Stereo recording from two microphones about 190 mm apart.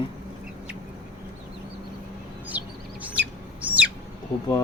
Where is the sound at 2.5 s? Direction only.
5° right (ahead or behind).